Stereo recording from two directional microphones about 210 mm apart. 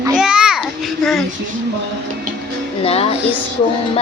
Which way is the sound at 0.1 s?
5° right (ahead or behind).